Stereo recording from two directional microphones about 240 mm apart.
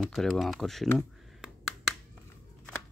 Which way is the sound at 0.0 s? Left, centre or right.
Centre.